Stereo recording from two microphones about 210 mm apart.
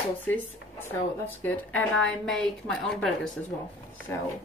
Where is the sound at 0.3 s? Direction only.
10° left (ahead or behind).